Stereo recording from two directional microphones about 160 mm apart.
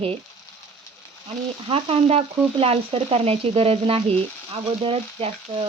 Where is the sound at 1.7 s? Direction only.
35° right (ahead or behind).